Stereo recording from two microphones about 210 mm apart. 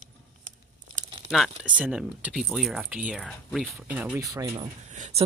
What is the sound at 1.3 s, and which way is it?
Speech, 5° right (ahead or behind).